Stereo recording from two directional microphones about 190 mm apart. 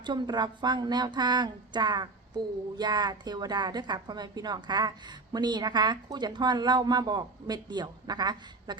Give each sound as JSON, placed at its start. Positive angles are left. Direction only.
{"t": 0.0, "sound": "a woman's voice", "side_deg": -25}